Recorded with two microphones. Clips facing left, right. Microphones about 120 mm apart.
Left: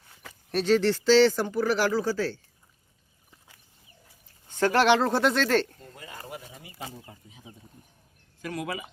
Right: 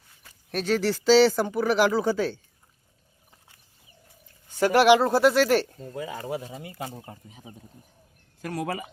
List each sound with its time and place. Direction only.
0.5 s speech: 5° right (ahead or behind)
4.6 s speech: 10° right (ahead or behind)
7.0 s speech: 45° right (ahead or behind)